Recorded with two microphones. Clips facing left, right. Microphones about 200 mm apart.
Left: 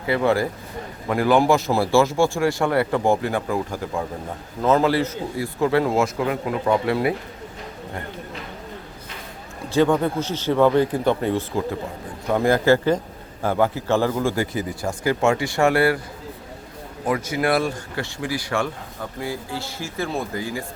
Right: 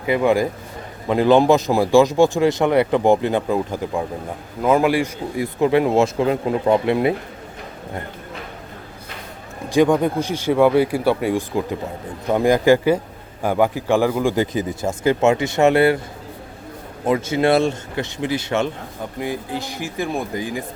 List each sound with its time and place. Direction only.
0.0 s a man's voice: 15° right (ahead or behind)
9.6 s a man's voice: 15° right (ahead or behind)
17.1 s a man's voice: 25° right (ahead or behind)